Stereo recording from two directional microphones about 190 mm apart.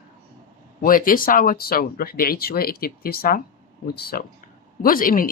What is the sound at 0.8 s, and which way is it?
Speech, 45° left (ahead or behind).